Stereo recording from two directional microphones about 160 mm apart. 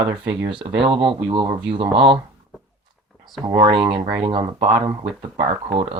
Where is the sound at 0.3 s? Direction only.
35° right (ahead or behind).